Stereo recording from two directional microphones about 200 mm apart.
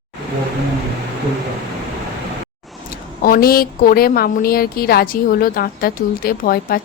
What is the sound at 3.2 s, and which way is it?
A woman's voice, 45° left (ahead or behind).